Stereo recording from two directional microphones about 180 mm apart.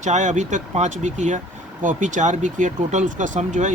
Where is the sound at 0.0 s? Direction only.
40° right (ahead or behind).